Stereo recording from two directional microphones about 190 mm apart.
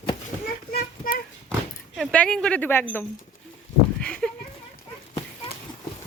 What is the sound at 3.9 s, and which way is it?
Speech, 5° left (ahead or behind).